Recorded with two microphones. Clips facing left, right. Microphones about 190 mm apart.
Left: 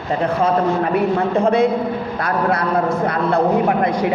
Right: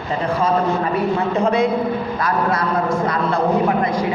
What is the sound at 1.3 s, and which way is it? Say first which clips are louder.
A man's voice: left 2 dB; 55° left (ahead or behind).